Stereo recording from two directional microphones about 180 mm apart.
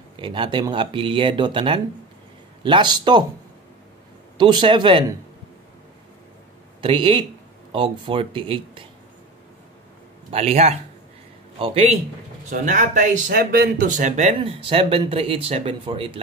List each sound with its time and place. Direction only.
0.2 s speech: 25° right (ahead or behind)
4.4 s speech: 25° right (ahead or behind)
6.8 s speech: 30° right (ahead or behind)
10.3 s speech: 35° right (ahead or behind)
12.4 s speech: 45° right (ahead or behind); by 16.2 s 30° right (ahead or behind)